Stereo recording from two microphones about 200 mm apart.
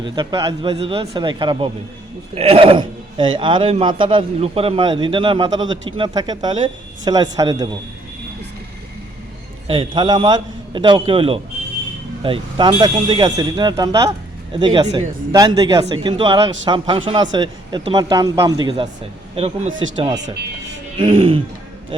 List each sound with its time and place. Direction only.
0.0 s speech: 25° right (ahead or behind)
9.6 s speech: 25° right (ahead or behind)